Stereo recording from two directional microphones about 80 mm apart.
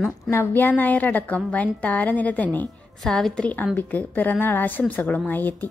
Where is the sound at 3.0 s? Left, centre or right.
Centre.